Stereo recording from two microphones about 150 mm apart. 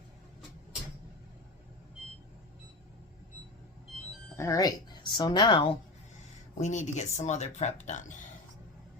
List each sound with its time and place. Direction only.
4.4 s speech: 20° left (ahead or behind)
6.6 s speech: 55° left (ahead or behind)